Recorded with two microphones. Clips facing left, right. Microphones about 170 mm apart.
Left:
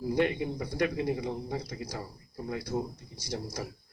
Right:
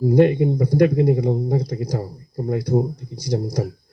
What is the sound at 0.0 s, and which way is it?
Speech, 40° right (ahead or behind).